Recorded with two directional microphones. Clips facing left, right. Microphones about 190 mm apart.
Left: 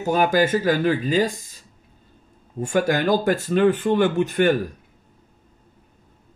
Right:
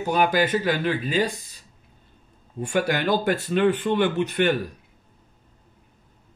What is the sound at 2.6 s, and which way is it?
Speech, 45° left (ahead or behind).